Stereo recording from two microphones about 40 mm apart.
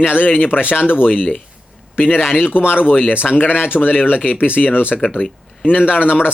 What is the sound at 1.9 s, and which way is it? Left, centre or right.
Speech, left.